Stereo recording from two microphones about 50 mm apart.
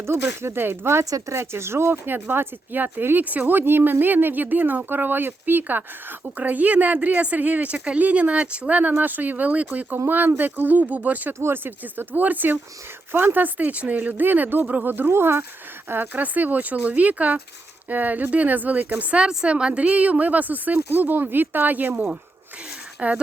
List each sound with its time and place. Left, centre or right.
0.0 s speech: right
2.3 s speech: right
3.2 s speech: right
3.6 s speech: right
8.8 s speech: right
11.5 s speech: right
15.1 s speech: right
16.1 s speech: right
23.0 s speech: right